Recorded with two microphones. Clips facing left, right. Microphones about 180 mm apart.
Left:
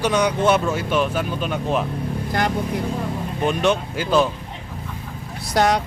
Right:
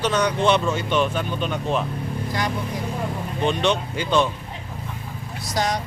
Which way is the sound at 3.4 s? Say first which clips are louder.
Left 2 dB; 5° left (ahead or behind).